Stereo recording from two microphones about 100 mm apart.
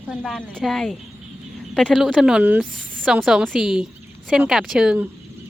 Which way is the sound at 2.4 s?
15° right (ahead or behind).